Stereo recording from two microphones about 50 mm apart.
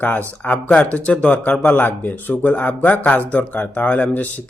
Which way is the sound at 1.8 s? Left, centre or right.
Left.